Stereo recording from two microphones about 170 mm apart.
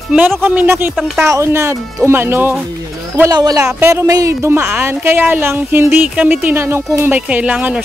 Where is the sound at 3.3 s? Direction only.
25° right (ahead or behind).